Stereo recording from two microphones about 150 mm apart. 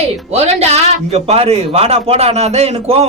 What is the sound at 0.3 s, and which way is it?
A man's voice, 45° right (ahead or behind).